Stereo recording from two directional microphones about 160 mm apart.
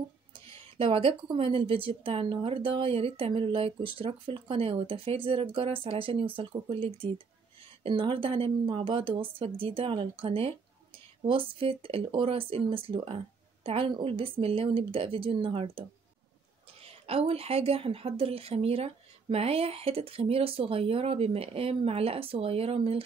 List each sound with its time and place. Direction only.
0.7 s speech: 35° right (ahead or behind)
16.8 s speech: 40° right (ahead or behind)